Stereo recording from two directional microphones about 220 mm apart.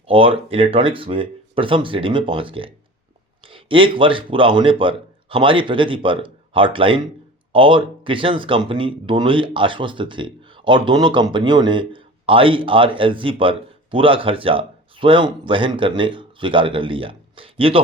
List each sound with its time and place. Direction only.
0.0 s speech: 25° right (ahead or behind)